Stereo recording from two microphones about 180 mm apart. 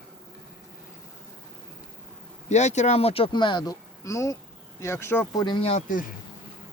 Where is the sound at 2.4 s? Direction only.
40° left (ahead or behind); by 5.4 s 15° left (ahead or behind).